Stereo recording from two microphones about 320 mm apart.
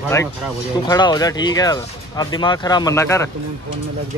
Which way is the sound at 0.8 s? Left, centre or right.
Centre.